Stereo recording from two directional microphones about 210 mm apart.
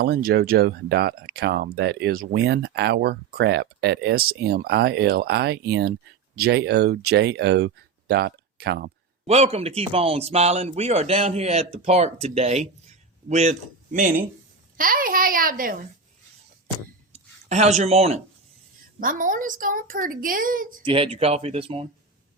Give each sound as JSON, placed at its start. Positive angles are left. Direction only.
{"t": 0.0, "sound": "speech", "side_deg": -45}
{"t": 9.2, "sound": "a man's voice", "side_deg": -30}
{"t": 17.1, "sound": "a sound", "side_deg": -30}
{"t": 18.9, "sound": "a woman's voice", "side_deg": -40}
{"t": 20.8, "sound": "a man's voice", "side_deg": -25}